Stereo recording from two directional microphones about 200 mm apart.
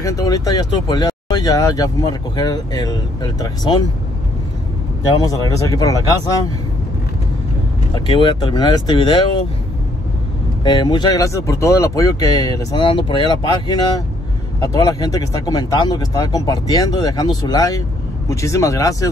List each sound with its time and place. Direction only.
0.0 s speech: 15° left (ahead or behind)
5.3 s speech: 15° left (ahead or behind)
7.9 s speech: 25° left (ahead or behind)
10.6 s speech: 20° left (ahead or behind)